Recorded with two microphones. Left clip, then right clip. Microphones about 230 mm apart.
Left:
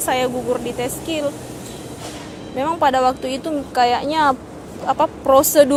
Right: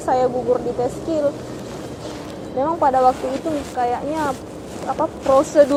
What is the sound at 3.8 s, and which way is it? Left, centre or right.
Speech, left.